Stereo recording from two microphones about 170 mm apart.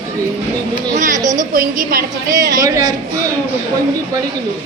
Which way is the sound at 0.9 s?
50° right (ahead or behind).